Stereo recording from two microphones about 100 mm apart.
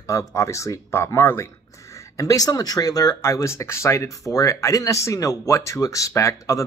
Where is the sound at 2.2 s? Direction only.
35° left (ahead or behind).